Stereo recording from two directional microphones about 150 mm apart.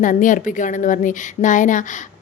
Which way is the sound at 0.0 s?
60° left (ahead or behind).